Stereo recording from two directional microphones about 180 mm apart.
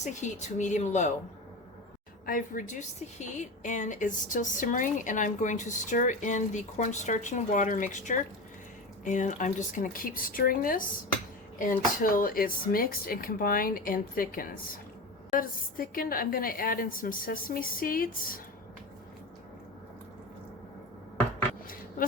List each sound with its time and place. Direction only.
0.0 s speech: 40° left (ahead or behind)
2.2 s a woman's voice: 50° left (ahead or behind)